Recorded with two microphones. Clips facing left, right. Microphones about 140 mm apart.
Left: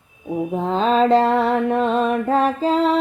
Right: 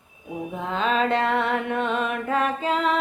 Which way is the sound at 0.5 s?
35° left (ahead or behind).